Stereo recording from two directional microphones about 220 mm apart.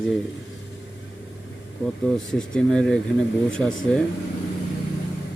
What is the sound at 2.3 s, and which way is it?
Speech, 5° left (ahead or behind).